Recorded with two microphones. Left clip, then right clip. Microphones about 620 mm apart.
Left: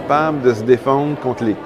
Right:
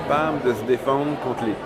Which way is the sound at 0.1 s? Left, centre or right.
Left.